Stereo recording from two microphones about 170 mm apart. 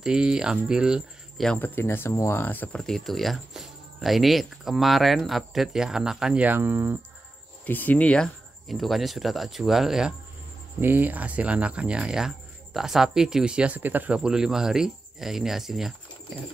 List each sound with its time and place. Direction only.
0.0 s speech: 5° right (ahead or behind)
1.6 s speech: 15° left (ahead or behind); by 7.0 s 10° right (ahead or behind)
7.6 s speech: 10° left (ahead or behind)